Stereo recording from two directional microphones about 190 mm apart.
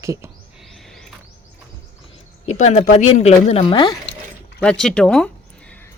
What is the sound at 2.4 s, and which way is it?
Speech, 35° left (ahead or behind).